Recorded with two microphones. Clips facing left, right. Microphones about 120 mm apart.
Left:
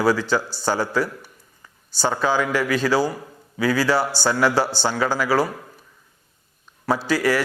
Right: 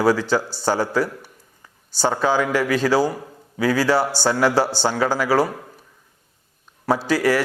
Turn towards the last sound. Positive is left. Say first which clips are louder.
# right 2 dB
turn(degrees=-50)  # may be behind; listen again after turning